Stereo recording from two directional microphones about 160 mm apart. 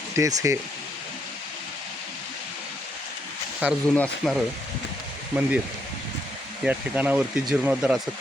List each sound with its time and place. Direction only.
0.2 s speech: 20° right (ahead or behind)
3.6 s speech: 10° right (ahead or behind)
3.9 s speech: 10° left (ahead or behind)
5.3 s speech: 10° right (ahead or behind)
6.7 s speech: 10° right (ahead or behind)